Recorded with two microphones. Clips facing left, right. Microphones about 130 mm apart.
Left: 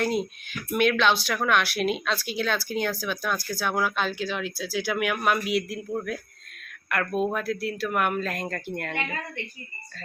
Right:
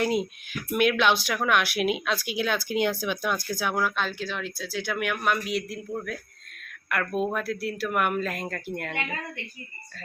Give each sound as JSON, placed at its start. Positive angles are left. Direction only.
{"t": 0.0, "sound": "speech", "side_deg": -5}
{"t": 3.8, "sound": "speech", "side_deg": 0}